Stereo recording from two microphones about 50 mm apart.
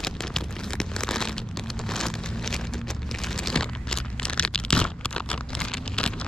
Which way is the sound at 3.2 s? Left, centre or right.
Centre.